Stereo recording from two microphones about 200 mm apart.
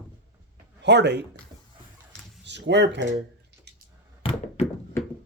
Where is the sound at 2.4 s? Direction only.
60° right (ahead or behind).